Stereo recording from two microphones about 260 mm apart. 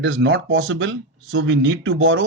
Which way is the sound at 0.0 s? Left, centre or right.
Right.